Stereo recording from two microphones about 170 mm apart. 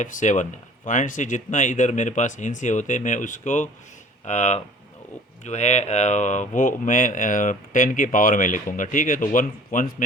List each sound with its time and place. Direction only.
0.0 s speech: 45° left (ahead or behind)